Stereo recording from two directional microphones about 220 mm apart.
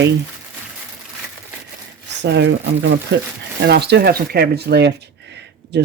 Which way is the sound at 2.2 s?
50° right (ahead or behind).